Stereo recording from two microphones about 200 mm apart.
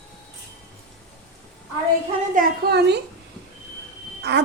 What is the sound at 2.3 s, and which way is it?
Speech, 50° right (ahead or behind).